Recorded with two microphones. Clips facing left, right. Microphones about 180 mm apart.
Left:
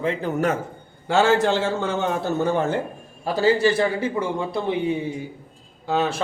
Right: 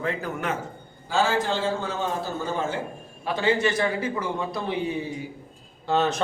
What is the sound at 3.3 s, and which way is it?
A man's voice, 35° left (ahead or behind).